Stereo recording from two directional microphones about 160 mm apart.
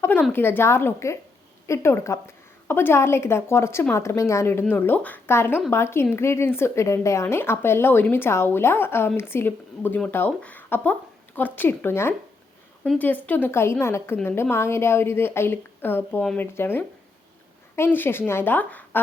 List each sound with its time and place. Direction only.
0.0 s speech: 10° left (ahead or behind)